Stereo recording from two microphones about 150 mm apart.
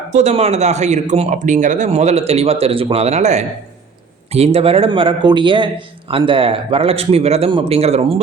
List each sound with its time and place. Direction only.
0.1 s a man's voice: 50° right (ahead or behind)